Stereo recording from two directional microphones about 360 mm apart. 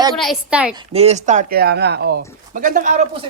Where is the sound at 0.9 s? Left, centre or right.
Centre.